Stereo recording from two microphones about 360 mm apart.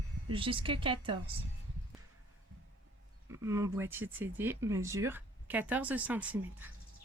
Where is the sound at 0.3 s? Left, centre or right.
Centre.